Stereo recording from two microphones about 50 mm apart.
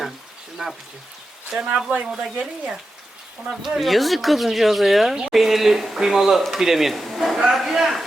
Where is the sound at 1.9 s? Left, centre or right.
Right.